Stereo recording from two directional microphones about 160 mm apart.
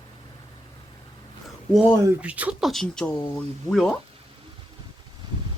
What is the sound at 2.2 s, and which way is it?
Speech, 10° right (ahead or behind).